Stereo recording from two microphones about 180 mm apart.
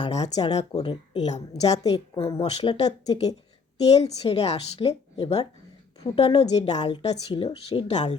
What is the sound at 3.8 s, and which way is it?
A woman's voice, 35° left (ahead or behind).